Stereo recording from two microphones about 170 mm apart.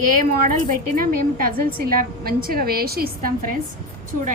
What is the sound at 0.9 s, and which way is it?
A woman's voice, 55° right (ahead or behind).